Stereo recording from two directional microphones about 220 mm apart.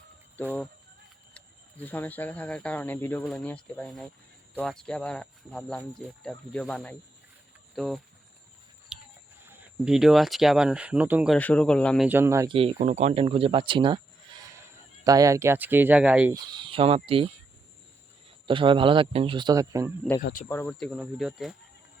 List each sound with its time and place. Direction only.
1.8 s speech: 10° left (ahead or behind)
8.9 s a sound: 5° right (ahead or behind)
9.5 s speech: 5° right (ahead or behind)
11.3 s speech: 5° left (ahead or behind)
12.0 s speech: 10° right (ahead or behind)
12.5 s speech: 30° right (ahead or behind)
15.0 s speech: 15° right (ahead or behind)
16.3 s speech: 20° right (ahead or behind)
20.5 s speech: 10° left (ahead or behind)